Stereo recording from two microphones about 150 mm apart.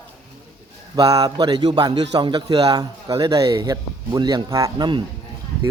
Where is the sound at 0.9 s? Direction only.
25° right (ahead or behind).